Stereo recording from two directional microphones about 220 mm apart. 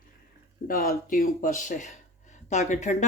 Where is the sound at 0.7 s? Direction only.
40° left (ahead or behind).